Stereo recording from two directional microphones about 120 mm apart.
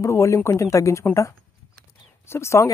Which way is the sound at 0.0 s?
25° left (ahead or behind).